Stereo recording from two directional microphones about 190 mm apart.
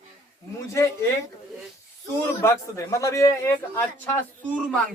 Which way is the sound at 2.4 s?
15° left (ahead or behind).